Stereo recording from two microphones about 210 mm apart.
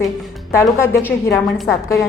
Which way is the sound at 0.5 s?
15° left (ahead or behind).